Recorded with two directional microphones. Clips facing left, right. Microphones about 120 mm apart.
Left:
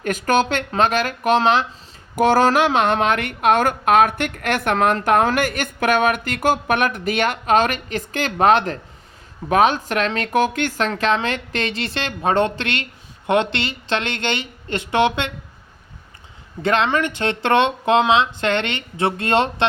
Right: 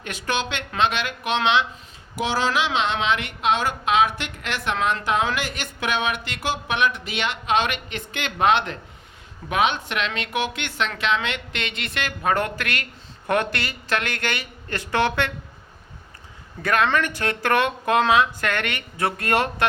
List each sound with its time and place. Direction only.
0.0 s speech: 45° left (ahead or behind); by 15.3 s 20° left (ahead or behind)
16.6 s speech: 25° left (ahead or behind)